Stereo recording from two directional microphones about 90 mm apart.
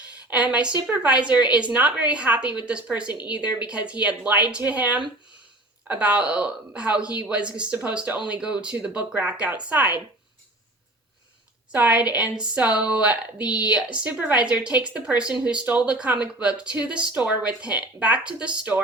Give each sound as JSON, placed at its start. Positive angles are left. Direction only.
{"t": 0.3, "sound": "a woman's voice", "side_deg": -15}
{"t": 3.1, "sound": "a woman's voice", "side_deg": 55}
{"t": 3.3, "sound": "a woman's voice", "side_deg": -15}
{"t": 11.7, "sound": "a woman's voice", "side_deg": -15}